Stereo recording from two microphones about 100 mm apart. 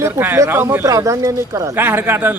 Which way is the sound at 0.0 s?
20° right (ahead or behind).